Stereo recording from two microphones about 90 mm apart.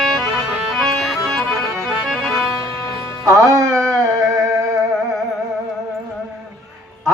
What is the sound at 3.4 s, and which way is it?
Music, 35° right (ahead or behind).